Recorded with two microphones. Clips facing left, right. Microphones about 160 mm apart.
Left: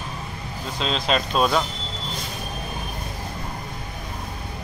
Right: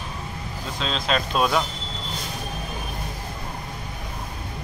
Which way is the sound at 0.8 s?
Centre (ahead or behind).